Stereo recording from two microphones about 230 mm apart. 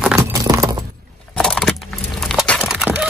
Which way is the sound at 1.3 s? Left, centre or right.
Centre.